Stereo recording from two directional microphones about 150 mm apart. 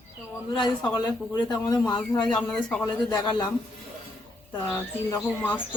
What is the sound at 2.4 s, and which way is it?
Frog, 5° left (ahead or behind).